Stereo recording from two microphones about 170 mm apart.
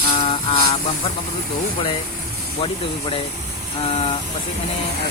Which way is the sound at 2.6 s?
30° left (ahead or behind).